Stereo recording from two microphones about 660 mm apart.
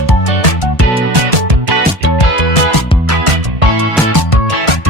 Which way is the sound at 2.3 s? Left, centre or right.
Left.